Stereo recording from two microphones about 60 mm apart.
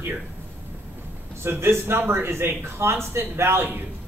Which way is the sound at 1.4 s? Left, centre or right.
Right.